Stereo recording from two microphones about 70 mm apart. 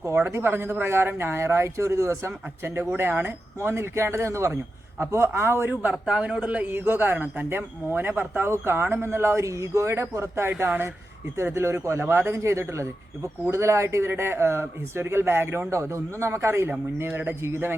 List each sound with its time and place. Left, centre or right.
0.3 s a man's voice: right
5.8 s a man's voice: centre; by 16.6 s right
17.1 s a man's voice: right